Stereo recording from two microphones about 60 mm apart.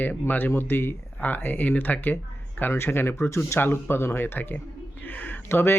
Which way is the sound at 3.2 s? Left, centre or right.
Left.